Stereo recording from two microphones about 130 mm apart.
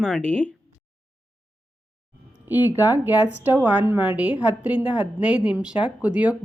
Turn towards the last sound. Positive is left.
turn(degrees=-10)  # may be behind; listen again after turning